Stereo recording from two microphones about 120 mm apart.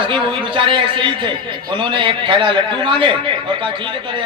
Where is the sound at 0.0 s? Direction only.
45° right (ahead or behind).